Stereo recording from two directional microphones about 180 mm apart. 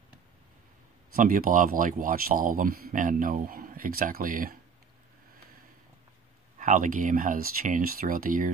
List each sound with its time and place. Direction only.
1.1 s speech: 50° right (ahead or behind)
6.6 s speech: 45° right (ahead or behind)